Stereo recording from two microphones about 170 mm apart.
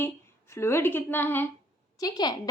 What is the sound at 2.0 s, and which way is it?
Speech, 20° left (ahead or behind).